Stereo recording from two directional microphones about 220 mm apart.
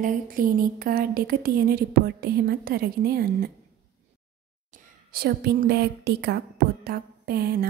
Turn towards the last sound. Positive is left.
turn(degrees=-45)  # may be behind; listen again after turning